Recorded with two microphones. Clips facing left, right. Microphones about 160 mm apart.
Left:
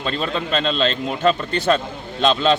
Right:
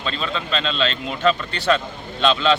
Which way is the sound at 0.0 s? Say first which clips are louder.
Left 3 dB; 45° left (ahead or behind).